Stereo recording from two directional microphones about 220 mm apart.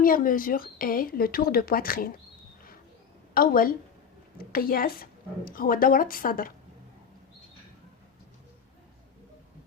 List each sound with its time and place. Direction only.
0.0 s speech: 40° left (ahead or behind)
3.3 s speech: 40° left (ahead or behind)